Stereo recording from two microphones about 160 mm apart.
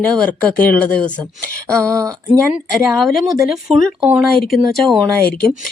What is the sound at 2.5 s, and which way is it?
Speech, centre (ahead or behind).